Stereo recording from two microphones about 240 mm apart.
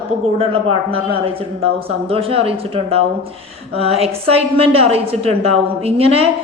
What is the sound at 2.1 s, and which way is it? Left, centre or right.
A woman's voice, right.